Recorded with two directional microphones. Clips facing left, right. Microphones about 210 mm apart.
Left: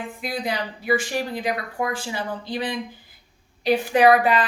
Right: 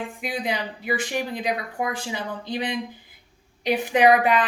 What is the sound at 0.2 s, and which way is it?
A woman's voice, 15° right (ahead or behind).